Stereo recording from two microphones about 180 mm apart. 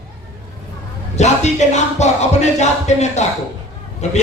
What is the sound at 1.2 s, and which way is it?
Music, 40° left (ahead or behind).